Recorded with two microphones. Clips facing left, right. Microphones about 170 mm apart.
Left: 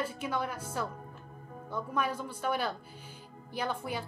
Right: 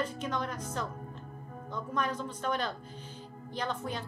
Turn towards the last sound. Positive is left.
turn(degrees=10)  # may be behind; listen again after turning